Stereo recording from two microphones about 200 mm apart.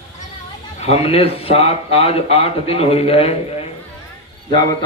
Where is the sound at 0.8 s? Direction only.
30° left (ahead or behind).